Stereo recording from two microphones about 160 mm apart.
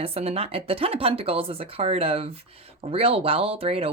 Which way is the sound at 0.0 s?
40° right (ahead or behind).